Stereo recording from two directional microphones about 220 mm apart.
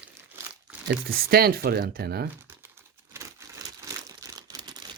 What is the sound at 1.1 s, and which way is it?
Speech, 45° right (ahead or behind).